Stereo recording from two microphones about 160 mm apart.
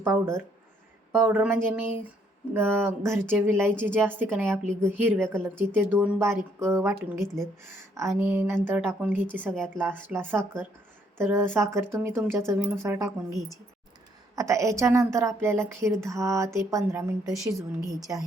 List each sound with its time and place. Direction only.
0.0 s a woman's voice: 15° right (ahead or behind)
7.9 s a woman's voice: 15° right (ahead or behind)
14.3 s a woman's voice: 20° right (ahead or behind)